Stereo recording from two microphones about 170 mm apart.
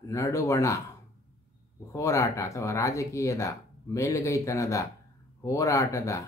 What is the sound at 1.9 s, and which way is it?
Speech, 20° left (ahead or behind).